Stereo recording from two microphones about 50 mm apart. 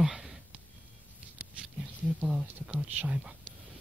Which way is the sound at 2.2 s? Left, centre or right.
Centre.